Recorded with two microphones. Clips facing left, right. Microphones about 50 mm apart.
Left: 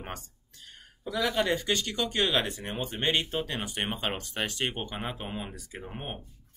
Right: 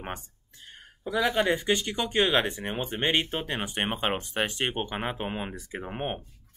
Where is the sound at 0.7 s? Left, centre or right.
Right.